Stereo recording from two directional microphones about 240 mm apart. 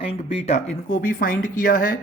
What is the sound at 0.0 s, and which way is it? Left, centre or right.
Speech, left.